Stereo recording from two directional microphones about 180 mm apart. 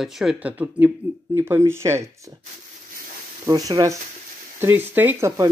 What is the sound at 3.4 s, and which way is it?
Speech, 20° right (ahead or behind).